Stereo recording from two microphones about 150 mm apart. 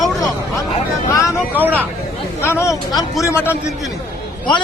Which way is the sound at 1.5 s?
10° right (ahead or behind).